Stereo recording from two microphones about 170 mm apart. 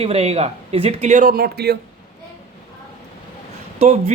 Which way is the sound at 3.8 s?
40° right (ahead or behind).